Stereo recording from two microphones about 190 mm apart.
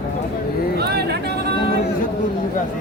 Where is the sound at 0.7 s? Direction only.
60° right (ahead or behind).